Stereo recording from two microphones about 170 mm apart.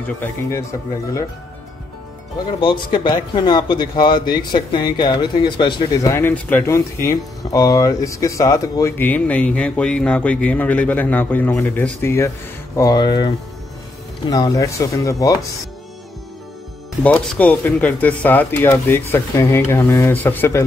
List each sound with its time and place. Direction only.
0.2 s speech: 15° left (ahead or behind)
2.6 s speech: 25° left (ahead or behind)
14.3 s speech: 20° left (ahead or behind)
17.0 s speech: 10° left (ahead or behind)